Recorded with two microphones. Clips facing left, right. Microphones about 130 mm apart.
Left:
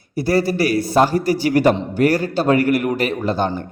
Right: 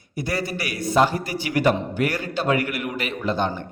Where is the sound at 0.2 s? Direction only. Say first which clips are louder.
Left 10 dB; 35° left (ahead or behind).